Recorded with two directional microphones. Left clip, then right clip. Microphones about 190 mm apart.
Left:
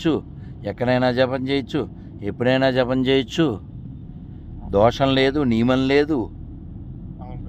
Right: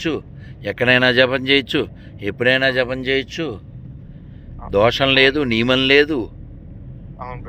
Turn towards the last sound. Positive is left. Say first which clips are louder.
# right 4 dB
turn(degrees=10)  # may be behind; listen again after turning